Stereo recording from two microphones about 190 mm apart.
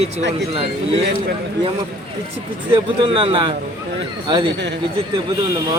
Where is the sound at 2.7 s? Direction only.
25° right (ahead or behind).